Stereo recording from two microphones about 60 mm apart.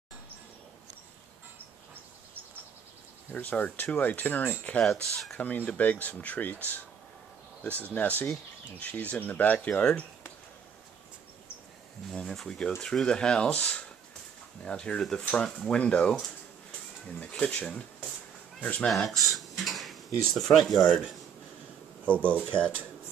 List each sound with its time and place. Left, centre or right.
3.3 s speech: left
7.9 s speech: left
12.1 s speech: centre
17.2 s speech: centre
18.9 s speech: centre
22.0 s speech: left